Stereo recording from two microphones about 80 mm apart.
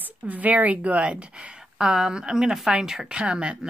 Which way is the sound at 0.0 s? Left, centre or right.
Right.